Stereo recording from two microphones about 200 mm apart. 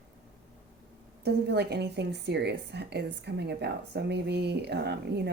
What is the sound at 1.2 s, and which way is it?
A woman's voice, 55° right (ahead or behind).